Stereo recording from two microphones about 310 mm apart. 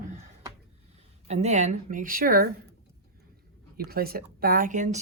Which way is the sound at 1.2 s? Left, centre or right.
Right.